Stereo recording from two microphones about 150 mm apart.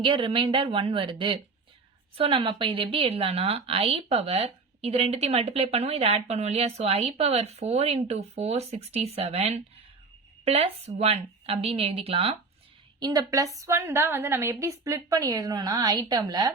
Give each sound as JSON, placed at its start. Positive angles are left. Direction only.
{"t": 0.0, "sound": "a woman's voice", "side_deg": -35}
{"t": 13.0, "sound": "a woman's voice", "side_deg": -25}